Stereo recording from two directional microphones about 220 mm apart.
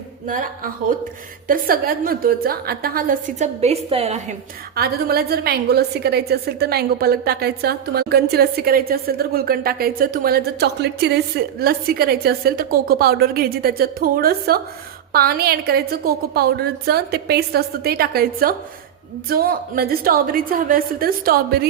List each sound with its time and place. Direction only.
0.3 s a woman's voice: 35° right (ahead or behind)
4.7 s a woman's voice: 45° right (ahead or behind)